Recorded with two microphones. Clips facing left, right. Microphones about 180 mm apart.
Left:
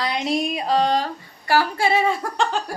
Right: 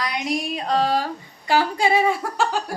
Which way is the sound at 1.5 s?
15° right (ahead or behind).